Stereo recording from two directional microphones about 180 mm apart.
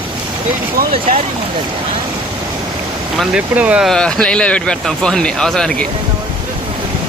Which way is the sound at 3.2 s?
5° right (ahead or behind).